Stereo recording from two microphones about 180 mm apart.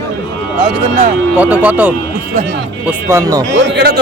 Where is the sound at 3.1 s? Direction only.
15° right (ahead or behind).